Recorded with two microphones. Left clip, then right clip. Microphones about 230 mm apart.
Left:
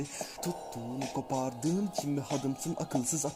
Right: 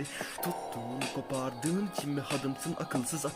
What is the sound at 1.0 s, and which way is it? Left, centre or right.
Speech, right.